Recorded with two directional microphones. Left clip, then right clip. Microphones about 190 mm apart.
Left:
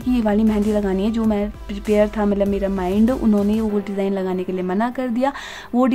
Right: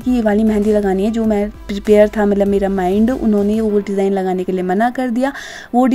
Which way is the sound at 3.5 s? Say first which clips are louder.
Right 6 dB; 20° right (ahead or behind).